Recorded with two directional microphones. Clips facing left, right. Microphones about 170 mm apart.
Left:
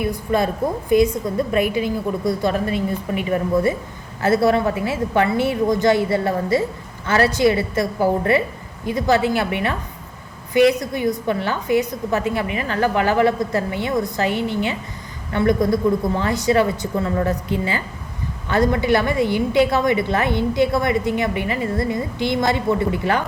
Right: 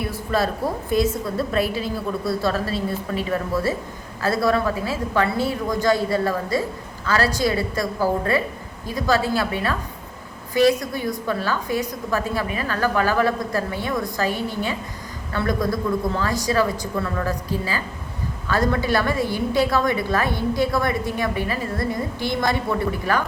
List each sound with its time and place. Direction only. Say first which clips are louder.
0.1 s a woman's voice: left 3 dB; 15° left (ahead or behind)